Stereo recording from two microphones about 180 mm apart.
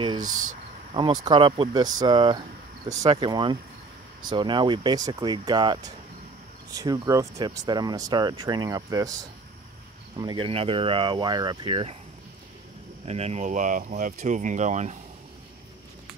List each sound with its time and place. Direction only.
0.2 s speech: 45° right (ahead or behind)
0.9 s speech: 25° right (ahead or behind)
13.0 s speech: 35° right (ahead or behind)